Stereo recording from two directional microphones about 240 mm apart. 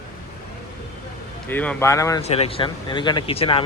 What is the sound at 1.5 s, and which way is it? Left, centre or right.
Speech, centre.